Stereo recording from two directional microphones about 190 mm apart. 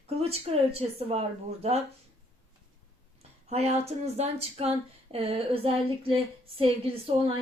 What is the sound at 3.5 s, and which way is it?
A woman's voice, 35° right (ahead or behind).